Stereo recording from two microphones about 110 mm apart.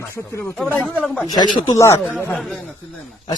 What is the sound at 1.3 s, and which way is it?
Speech, 35° left (ahead or behind).